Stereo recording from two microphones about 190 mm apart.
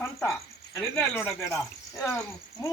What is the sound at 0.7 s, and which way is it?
Speech, 15° left (ahead or behind).